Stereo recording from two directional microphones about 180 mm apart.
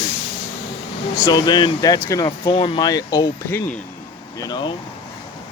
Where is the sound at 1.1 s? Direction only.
20° left (ahead or behind).